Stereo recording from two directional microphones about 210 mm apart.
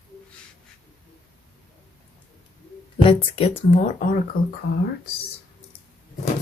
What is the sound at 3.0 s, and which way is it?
Speech, 25° left (ahead or behind).